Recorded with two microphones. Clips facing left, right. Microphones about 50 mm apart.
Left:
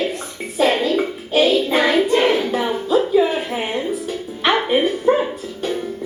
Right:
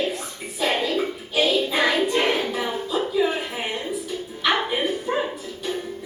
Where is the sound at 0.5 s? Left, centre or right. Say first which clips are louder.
Left 6 dB; left.